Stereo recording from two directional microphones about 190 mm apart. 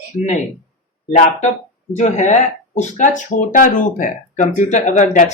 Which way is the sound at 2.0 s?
40° left (ahead or behind).